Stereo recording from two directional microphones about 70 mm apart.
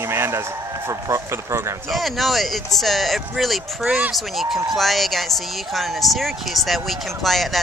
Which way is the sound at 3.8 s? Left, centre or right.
Right.